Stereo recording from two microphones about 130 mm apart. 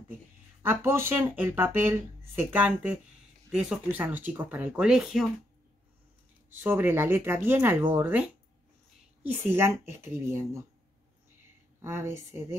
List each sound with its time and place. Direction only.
0.6 s speech: 20° right (ahead or behind)
6.5 s speech: 15° right (ahead or behind)
11.8 s speech: 20° right (ahead or behind)